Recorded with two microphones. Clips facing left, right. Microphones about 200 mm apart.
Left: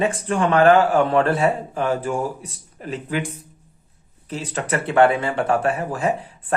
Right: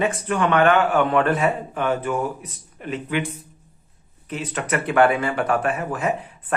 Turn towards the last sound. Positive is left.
turn(degrees=30)  # may be behind; listen again after turning